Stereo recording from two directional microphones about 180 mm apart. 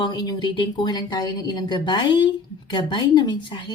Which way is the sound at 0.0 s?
25° left (ahead or behind).